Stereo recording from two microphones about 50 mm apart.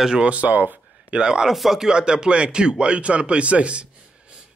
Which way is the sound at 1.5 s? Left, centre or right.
Centre.